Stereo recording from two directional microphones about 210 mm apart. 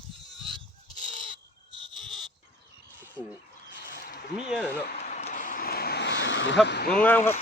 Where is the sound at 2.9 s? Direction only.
10° right (ahead or behind).